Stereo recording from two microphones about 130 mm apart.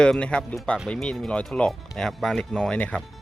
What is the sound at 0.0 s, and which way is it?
Speech, 5° left (ahead or behind).